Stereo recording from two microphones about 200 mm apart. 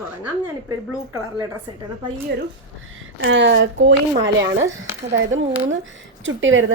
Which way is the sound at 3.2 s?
65° right (ahead or behind).